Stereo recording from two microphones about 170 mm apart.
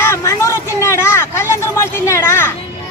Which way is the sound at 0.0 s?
15° left (ahead or behind).